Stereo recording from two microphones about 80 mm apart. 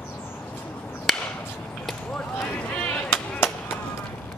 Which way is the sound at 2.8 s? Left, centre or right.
Left.